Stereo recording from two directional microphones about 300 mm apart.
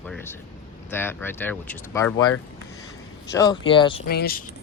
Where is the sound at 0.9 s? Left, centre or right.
Centre.